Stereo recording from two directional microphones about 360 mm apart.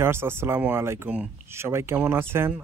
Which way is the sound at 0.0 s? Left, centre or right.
Centre.